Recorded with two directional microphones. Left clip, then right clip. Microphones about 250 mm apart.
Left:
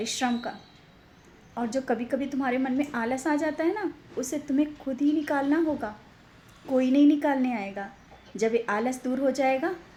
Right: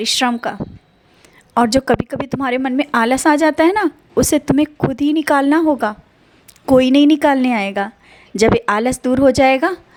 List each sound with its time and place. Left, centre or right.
0.0 s a woman's voice: right
1.5 s a woman's voice: right